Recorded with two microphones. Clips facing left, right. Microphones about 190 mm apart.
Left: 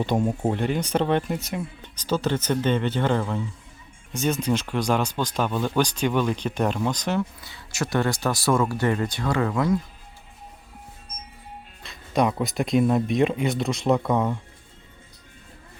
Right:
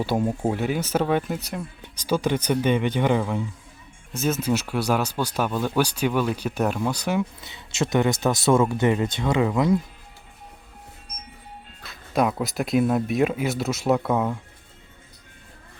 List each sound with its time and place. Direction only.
0.0 s speech: 5° right (ahead or behind)
1.8 s speech: 10° right (ahead or behind)
7.4 s speech: 25° right (ahead or behind)
11.8 s speech: 5° right (ahead or behind)